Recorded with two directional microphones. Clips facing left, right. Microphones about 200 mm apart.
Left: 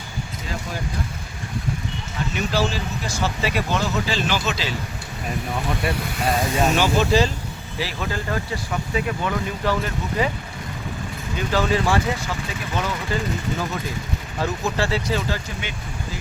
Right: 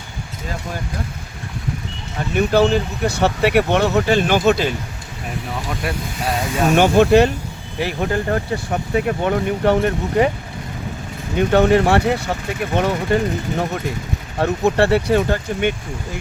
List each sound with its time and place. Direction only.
2.3 s speech: 55° right (ahead or behind)
5.9 s speech: centre (ahead or behind)
6.7 s speech: 60° right (ahead or behind)
11.3 s speech: 60° right (ahead or behind)